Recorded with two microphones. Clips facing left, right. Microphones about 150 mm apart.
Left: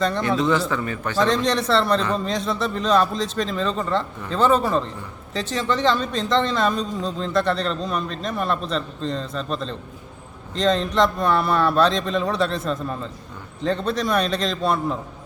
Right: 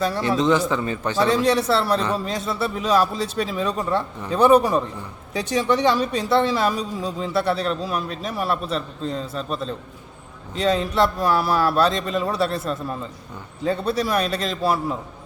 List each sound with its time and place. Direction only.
0.2 s a man's voice: 25° right (ahead or behind)
1.2 s a man's voice: 5° right (ahead or behind)